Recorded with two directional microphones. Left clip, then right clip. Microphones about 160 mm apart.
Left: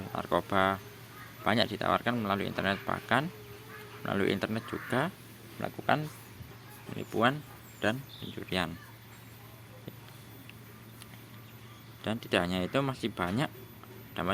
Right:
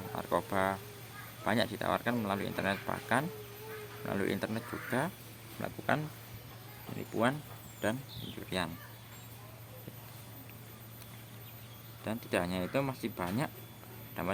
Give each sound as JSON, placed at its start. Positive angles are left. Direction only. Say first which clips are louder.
{"t": 0.1, "sound": "speech", "louder": "left 3 dB", "side_deg": 15}
{"t": 7.2, "sound": "speech", "louder": "left 4 dB", "side_deg": 10}
{"t": 12.0, "sound": "speech", "louder": "left 4 dB", "side_deg": 20}